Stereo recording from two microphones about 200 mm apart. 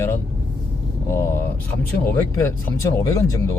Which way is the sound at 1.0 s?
15° left (ahead or behind).